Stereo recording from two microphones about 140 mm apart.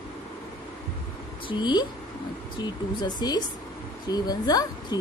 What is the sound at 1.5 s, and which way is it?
Speech, 30° left (ahead or behind).